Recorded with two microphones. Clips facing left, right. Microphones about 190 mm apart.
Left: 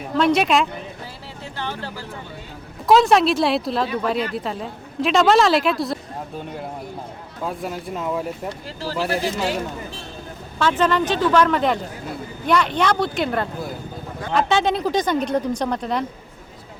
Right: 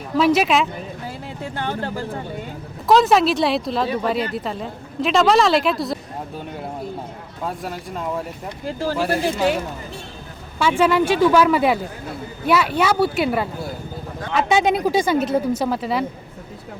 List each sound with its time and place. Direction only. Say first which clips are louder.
0.2 s a woman's voice: right 1 dB; 5° right (ahead or behind)
1.5 s speech: right 4 dB; 50° right (ahead or behind)
2.8 s a woman's voice: even; centre (ahead or behind)
7.4 s a woman's voice: left 1 dB; centre (ahead or behind)
8.6 s speech: right 6 dB; 50° right (ahead or behind)
10.6 s speech: right 2 dB; 10° right (ahead or behind)